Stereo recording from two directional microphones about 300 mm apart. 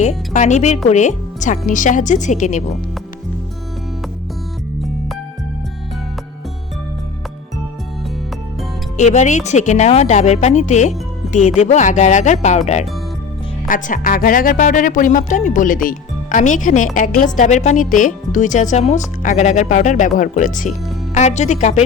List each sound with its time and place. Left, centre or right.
0.0 s speech: left
9.0 s speech: left